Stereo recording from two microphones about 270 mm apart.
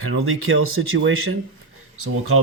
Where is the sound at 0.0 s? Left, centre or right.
Right.